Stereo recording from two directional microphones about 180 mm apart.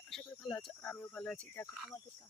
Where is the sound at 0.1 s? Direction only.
5° left (ahead or behind).